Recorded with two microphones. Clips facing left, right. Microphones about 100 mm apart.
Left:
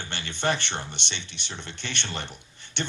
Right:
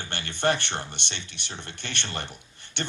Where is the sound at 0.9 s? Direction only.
55° right (ahead or behind).